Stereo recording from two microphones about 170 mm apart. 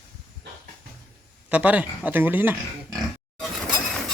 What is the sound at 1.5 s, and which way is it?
Speech, 10° right (ahead or behind).